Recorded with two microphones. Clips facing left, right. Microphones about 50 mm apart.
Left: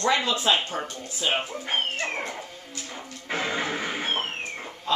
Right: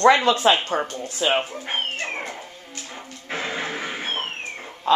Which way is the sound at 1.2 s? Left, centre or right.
Right.